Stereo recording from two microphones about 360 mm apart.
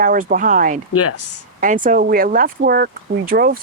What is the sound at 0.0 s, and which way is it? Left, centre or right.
Speech, right.